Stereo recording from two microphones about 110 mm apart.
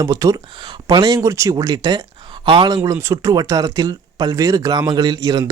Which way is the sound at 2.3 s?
45° right (ahead or behind).